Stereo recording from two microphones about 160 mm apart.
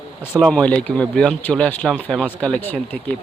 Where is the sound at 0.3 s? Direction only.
5° left (ahead or behind).